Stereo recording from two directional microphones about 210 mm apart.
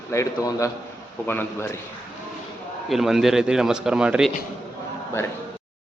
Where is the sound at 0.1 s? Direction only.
15° left (ahead or behind).